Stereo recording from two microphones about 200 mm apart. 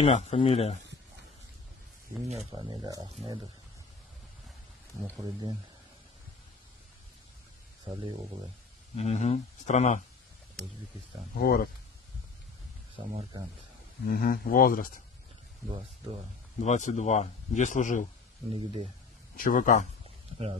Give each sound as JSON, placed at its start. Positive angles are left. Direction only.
{"t": 0.0, "sound": "speech", "side_deg": 30}
{"t": 2.2, "sound": "speech", "side_deg": -30}
{"t": 2.7, "sound": "speech", "side_deg": -20}
{"t": 5.2, "sound": "speech", "side_deg": -20}
{"t": 7.9, "sound": "speech", "side_deg": -30}
{"t": 8.9, "sound": "speech", "side_deg": 35}
{"t": 11.3, "sound": "speech", "side_deg": 50}
{"t": 12.9, "sound": "speech", "side_deg": -25}
{"t": 14.0, "sound": "speech", "side_deg": 45}
{"t": 16.6, "sound": "speech", "side_deg": 35}
{"t": 18.5, "sound": "speech", "side_deg": -25}
{"t": 19.3, "sound": "speech", "side_deg": 45}